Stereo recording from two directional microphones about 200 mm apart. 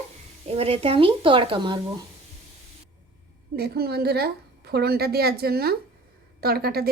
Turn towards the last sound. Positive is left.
turn(degrees=-50)  # may be behind; listen again after turning